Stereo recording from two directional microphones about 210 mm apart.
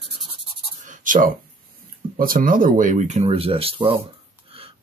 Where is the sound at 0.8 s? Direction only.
40° right (ahead or behind).